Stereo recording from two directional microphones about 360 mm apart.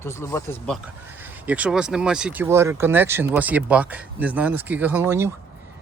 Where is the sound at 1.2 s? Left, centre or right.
Centre.